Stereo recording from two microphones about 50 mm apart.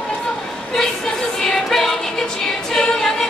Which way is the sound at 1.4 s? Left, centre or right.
Centre.